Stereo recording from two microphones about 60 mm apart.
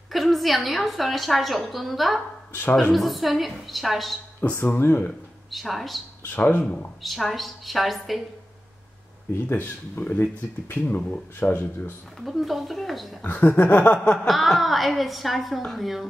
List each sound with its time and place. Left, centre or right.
0.1 s a woman's voice: centre
4.4 s speech: left
5.5 s a woman's voice: centre
6.2 s speech: left
7.0 s a woman's voice: centre
9.3 s speech: left
12.2 s a woman's voice: centre
13.2 s speech: left
13.9 s chuckle: centre
14.2 s a woman's voice: centre